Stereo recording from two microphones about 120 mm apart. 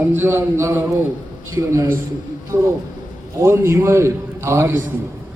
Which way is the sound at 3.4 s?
20° right (ahead or behind).